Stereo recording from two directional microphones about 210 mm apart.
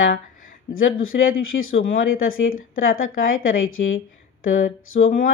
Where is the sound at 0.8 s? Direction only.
70° left (ahead or behind).